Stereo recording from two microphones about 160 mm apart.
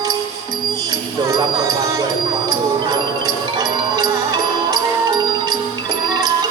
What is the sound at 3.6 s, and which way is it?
Music, 25° right (ahead or behind).